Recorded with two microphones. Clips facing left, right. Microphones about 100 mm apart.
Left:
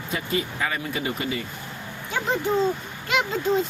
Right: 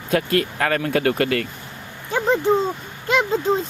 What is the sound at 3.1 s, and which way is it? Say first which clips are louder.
Speech: right 4 dB; 35° right (ahead or behind).